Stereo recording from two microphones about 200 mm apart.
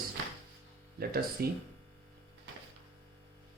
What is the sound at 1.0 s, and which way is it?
Speech, 50° right (ahead or behind).